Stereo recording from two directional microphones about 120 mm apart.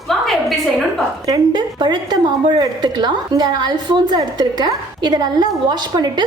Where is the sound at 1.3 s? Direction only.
35° right (ahead or behind).